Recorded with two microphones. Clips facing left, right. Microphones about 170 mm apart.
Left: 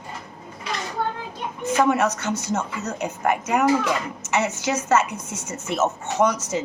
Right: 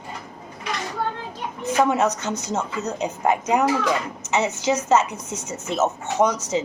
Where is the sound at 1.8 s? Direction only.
20° right (ahead or behind).